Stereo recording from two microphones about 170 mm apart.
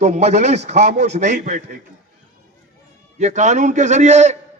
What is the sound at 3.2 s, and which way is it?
A man's voice, 45° right (ahead or behind).